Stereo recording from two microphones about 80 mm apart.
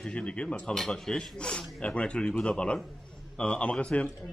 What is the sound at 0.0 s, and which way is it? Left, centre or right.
A man's voice, centre.